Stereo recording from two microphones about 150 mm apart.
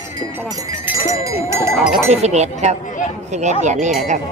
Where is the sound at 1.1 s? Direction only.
20° right (ahead or behind).